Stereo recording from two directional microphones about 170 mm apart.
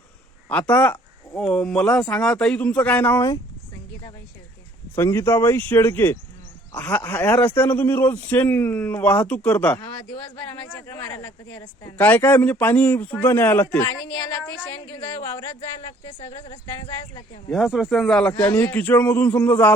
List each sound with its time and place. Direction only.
0.4 s speech: 10° left (ahead or behind)
4.9 s speech: 15° left (ahead or behind)
15.9 s speech: 30° left (ahead or behind)
17.5 s speech: centre (ahead or behind)